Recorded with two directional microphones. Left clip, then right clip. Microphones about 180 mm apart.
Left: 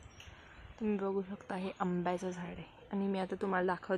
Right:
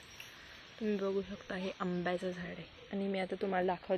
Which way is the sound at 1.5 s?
5° left (ahead or behind).